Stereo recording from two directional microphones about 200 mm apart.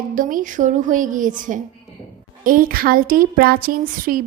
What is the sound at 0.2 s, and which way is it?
A woman's voice, 40° right (ahead or behind).